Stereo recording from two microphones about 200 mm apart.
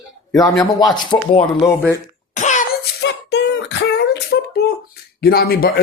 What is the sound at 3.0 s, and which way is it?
Beatboxing, 60° left (ahead or behind).